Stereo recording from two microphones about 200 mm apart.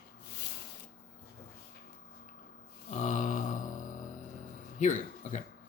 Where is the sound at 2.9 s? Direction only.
40° left (ahead or behind).